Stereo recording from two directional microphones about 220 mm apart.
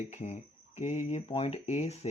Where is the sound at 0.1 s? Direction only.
30° left (ahead or behind).